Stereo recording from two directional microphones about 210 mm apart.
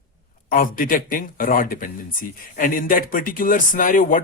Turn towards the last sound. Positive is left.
turn(degrees=40)  # may be behind; listen again after turning